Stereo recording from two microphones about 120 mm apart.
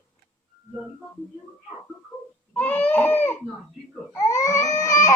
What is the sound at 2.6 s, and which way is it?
Baby cry, 15° left (ahead or behind).